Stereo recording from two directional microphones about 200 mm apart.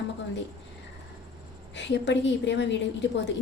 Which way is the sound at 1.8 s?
60° left (ahead or behind).